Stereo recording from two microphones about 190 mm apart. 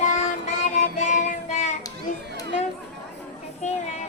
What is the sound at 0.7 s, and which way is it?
Music, 40° left (ahead or behind).